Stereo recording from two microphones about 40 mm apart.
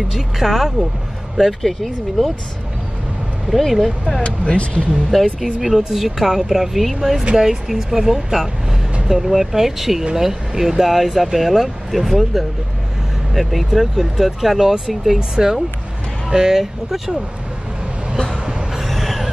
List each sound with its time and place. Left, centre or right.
0.1 s speech: centre
3.4 s speech: centre
4.2 s speech: left
4.9 s speech: centre
15.1 s speech: centre
18.4 s a sound: centre
18.9 s vehicle: centre